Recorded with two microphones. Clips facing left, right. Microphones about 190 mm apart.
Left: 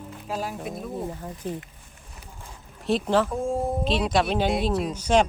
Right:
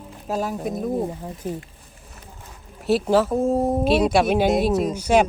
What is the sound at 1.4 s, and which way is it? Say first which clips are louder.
Speech: right 3 dB; 10° right (ahead or behind).